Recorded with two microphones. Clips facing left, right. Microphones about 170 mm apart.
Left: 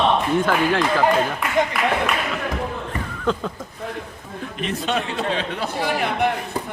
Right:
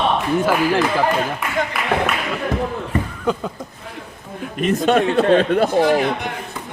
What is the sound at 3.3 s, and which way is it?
Speech, 10° right (ahead or behind).